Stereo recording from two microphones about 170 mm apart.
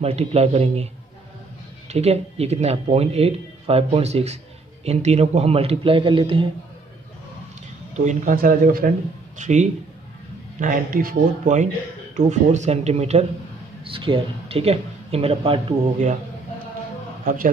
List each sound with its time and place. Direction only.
0.0 s speech: 35° right (ahead or behind)
1.9 s speech: 40° right (ahead or behind)
7.9 s speech: 45° right (ahead or behind)
9.4 s speech: 45° right (ahead or behind)
10.6 s speech: 55° right (ahead or behind); by 16.2 s 40° right (ahead or behind)
17.2 s speech: 55° right (ahead or behind)